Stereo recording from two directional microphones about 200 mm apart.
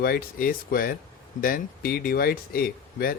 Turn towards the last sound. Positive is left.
turn(degrees=50)  # may be behind; listen again after turning